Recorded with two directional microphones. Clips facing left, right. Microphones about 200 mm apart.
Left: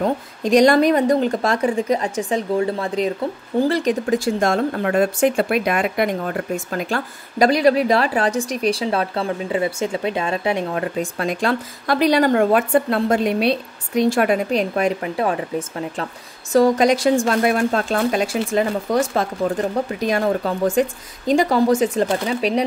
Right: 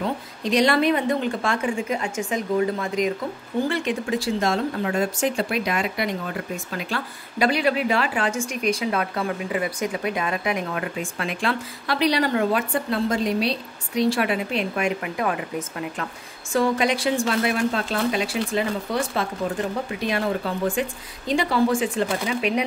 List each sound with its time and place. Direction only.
0.0 s speech: 45° left (ahead or behind); by 16.1 s 30° left (ahead or behind)
16.5 s speech: 40° left (ahead or behind)